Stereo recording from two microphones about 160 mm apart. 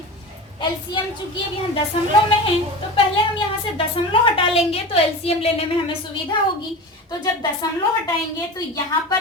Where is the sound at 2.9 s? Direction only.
35° left (ahead or behind).